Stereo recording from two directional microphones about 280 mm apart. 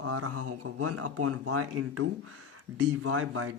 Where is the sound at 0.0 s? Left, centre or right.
Right.